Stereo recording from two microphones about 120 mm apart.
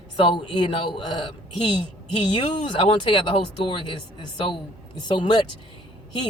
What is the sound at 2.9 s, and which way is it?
Speech, 45° left (ahead or behind).